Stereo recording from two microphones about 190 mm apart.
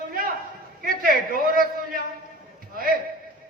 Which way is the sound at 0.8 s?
50° right (ahead or behind).